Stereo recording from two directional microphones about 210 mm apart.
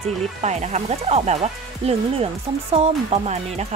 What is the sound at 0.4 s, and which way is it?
A woman's voice, 35° right (ahead or behind).